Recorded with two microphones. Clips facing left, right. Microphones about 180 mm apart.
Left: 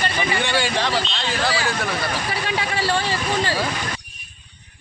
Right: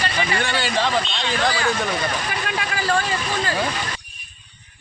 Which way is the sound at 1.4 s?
5° left (ahead or behind).